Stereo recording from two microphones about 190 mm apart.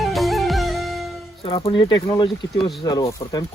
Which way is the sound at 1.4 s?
30° left (ahead or behind).